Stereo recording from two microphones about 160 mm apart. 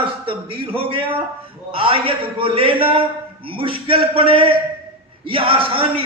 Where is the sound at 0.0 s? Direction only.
35° right (ahead or behind).